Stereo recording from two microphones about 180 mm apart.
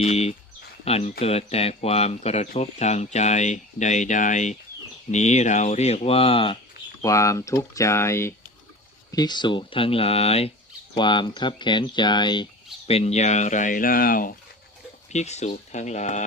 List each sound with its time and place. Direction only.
0.0 s speech: 35° left (ahead or behind)
7.0 s speech: 15° left (ahead or behind)
12.9 s speech: 35° left (ahead or behind); by 14.3 s 50° left (ahead or behind)
15.1 s speech: 40° left (ahead or behind)